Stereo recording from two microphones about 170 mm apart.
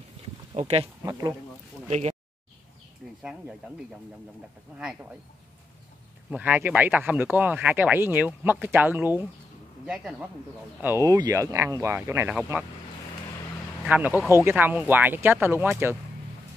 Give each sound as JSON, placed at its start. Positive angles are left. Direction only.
{"t": 0.6, "sound": "speech", "side_deg": -40}
{"t": 1.9, "sound": "speech", "side_deg": -40}
{"t": 3.2, "sound": "speech", "side_deg": -5}
{"t": 6.3, "sound": "speech", "side_deg": -10}
{"t": 10.8, "sound": "speech", "side_deg": -15}
{"t": 13.8, "sound": "speech", "side_deg": -10}